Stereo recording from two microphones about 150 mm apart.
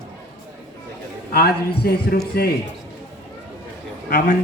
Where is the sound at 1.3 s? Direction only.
90° left.